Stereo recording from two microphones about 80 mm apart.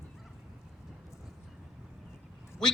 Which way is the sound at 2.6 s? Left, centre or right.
Centre.